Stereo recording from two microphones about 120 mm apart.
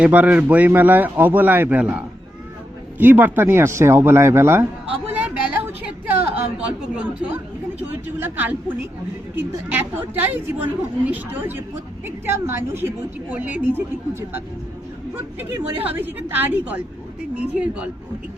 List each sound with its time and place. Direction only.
0.0 s speech: 15° right (ahead or behind)
5.0 s a sound: 15° right (ahead or behind)
7.9 s speech: 15° right (ahead or behind)